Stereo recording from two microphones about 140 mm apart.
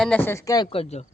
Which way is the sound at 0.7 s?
45° left (ahead or behind).